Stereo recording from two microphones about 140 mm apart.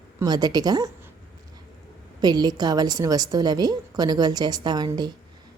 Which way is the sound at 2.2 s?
30° right (ahead or behind).